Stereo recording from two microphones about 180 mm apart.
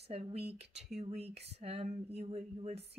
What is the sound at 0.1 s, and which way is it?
Speech, 35° right (ahead or behind).